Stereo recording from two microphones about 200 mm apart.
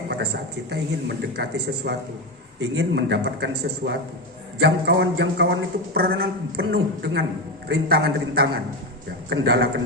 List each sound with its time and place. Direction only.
0.7 s a man's voice: 55° right (ahead or behind)